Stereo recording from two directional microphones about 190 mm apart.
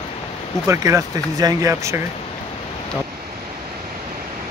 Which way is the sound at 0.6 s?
15° right (ahead or behind).